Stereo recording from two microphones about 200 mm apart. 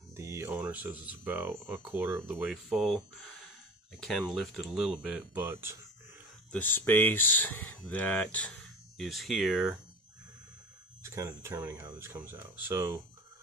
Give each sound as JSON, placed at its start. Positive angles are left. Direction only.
{"t": 0.1, "sound": "speech", "side_deg": -15}
{"t": 6.5, "sound": "speech", "side_deg": 10}
{"t": 11.0, "sound": "speech", "side_deg": -15}